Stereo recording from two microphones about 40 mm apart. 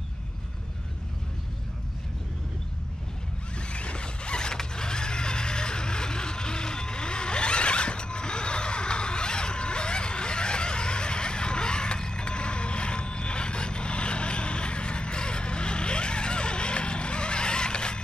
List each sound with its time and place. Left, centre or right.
3.7 s zipper: left